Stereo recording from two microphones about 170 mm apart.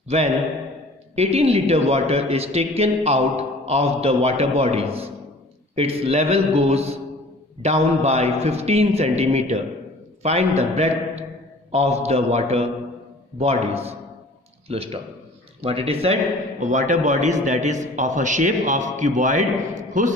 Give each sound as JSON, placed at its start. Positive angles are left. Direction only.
{"t": 0.1, "sound": "speech", "side_deg": -40}
{"t": 16.6, "sound": "a man's voice", "side_deg": -45}